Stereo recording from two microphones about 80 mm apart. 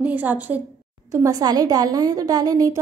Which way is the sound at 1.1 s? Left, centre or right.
Right.